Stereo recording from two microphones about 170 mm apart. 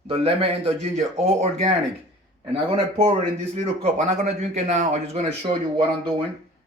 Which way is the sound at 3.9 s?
45° right (ahead or behind).